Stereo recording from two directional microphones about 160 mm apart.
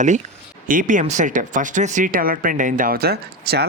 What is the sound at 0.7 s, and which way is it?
Speech, 55° right (ahead or behind).